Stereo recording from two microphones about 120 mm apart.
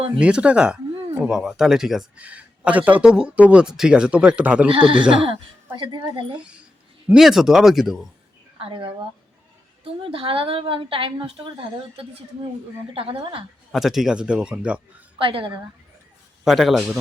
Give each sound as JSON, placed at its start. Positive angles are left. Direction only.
{"t": 0.2, "sound": "speech", "side_deg": -10}
{"t": 4.7, "sound": "a woman's voice", "side_deg": -45}
{"t": 7.1, "sound": "speech", "side_deg": -5}
{"t": 8.5, "sound": "a woman's voice", "side_deg": -45}
{"t": 12.9, "sound": "a woman's voice", "side_deg": -50}
{"t": 13.7, "sound": "speech", "side_deg": 0}
{"t": 15.2, "sound": "a woman's voice", "side_deg": -45}
{"t": 16.4, "sound": "speech", "side_deg": 0}